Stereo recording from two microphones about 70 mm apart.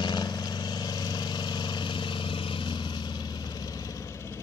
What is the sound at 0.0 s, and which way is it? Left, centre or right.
Vehicle, left.